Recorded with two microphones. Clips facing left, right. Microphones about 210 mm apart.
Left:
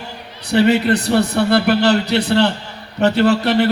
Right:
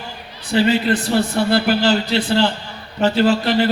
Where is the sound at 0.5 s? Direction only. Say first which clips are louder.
Left 3 dB; 65° left (ahead or behind).